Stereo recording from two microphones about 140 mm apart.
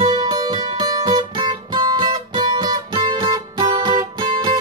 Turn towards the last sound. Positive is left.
turn(degrees=-30)  # may be behind; listen again after turning